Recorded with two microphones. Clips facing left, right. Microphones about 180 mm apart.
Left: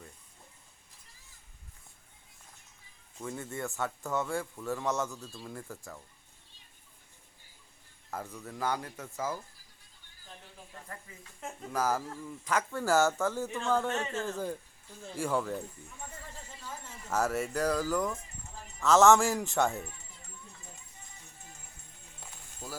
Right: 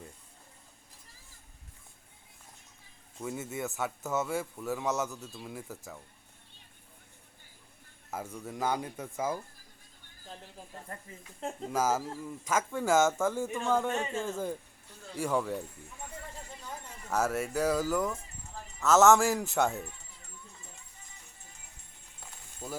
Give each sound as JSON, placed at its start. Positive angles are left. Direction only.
{"t": 3.2, "sound": "a man's voice", "side_deg": -5}
{"t": 8.1, "sound": "speech", "side_deg": -10}
{"t": 10.7, "sound": "speech", "side_deg": -35}
{"t": 12.5, "sound": "a man's voice", "side_deg": -10}
{"t": 17.1, "sound": "a man's voice", "side_deg": 0}
{"t": 22.6, "sound": "speech", "side_deg": -10}